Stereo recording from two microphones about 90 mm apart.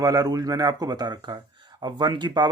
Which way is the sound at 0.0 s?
45° right (ahead or behind).